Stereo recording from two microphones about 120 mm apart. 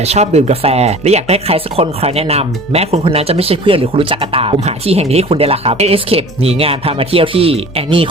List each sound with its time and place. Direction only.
0.0 s speech: 65° right (ahead or behind)